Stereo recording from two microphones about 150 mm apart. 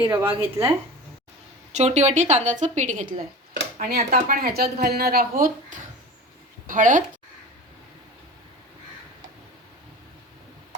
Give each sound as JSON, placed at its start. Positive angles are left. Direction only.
{"t": 0.0, "sound": "speech", "side_deg": -15}
{"t": 1.7, "sound": "a woman's voice", "side_deg": -50}